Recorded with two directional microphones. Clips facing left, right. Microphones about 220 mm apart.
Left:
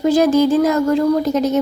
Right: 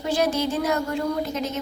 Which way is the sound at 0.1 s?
90° left.